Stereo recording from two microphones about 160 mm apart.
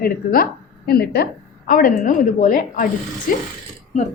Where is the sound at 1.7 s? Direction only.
60° left (ahead or behind).